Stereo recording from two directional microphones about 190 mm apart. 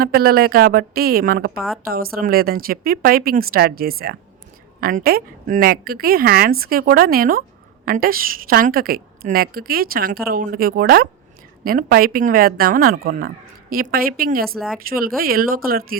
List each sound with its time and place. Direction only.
0.0 s a woman's voice: 50° right (ahead or behind)